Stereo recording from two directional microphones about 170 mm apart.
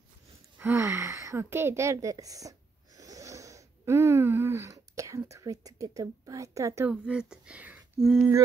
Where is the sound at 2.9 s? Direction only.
20° right (ahead or behind); by 8.2 s centre (ahead or behind).